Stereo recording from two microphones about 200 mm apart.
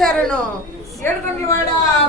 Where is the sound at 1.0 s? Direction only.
10° left (ahead or behind).